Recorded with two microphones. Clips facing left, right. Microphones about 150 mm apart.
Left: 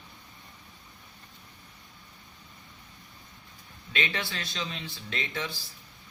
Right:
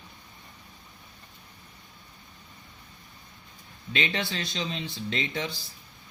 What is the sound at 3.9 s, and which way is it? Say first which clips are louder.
Speech: right 3 dB; 25° right (ahead or behind).